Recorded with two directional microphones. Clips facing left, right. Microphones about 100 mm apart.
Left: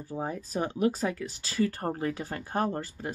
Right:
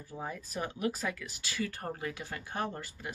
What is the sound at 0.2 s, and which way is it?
Speech, 30° left (ahead or behind).